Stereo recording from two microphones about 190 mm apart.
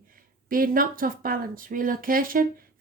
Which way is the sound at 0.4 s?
50° right (ahead or behind).